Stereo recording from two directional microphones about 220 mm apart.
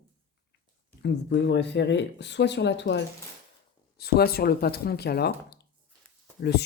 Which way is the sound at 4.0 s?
45° left (ahead or behind).